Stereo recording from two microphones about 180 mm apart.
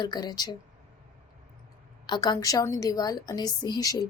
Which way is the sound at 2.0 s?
25° left (ahead or behind).